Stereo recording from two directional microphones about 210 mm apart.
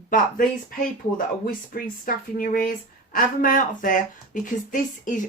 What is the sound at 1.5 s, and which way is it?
A woman's voice, 45° left (ahead or behind).